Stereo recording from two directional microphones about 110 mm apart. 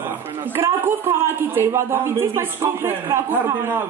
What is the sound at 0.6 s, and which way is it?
A man's voice, 25° right (ahead or behind).